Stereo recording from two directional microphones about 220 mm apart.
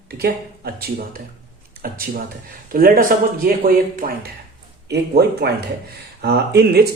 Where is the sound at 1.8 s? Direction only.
40° right (ahead or behind).